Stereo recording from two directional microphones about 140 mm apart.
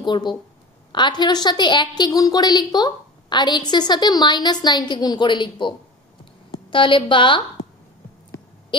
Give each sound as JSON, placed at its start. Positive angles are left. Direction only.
{"t": 0.0, "sound": "a woman's voice", "side_deg": 30}